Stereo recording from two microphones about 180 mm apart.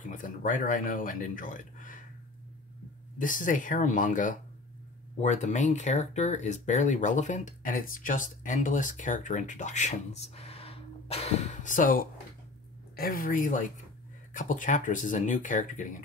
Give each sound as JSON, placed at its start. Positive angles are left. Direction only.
{"t": 0.0, "sound": "speech", "side_deg": 45}
{"t": 3.2, "sound": "speech", "side_deg": 50}